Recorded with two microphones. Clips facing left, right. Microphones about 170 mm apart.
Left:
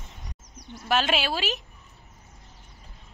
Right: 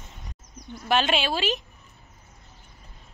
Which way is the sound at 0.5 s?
80° left.